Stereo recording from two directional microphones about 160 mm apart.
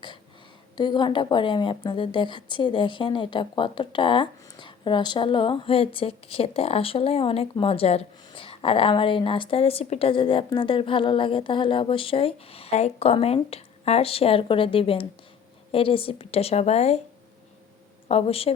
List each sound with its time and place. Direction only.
0.8 s a woman's voice: 30° left (ahead or behind)
18.1 s a woman's voice: 40° left (ahead or behind)